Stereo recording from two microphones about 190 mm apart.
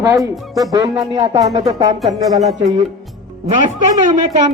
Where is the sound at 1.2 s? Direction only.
30° right (ahead or behind).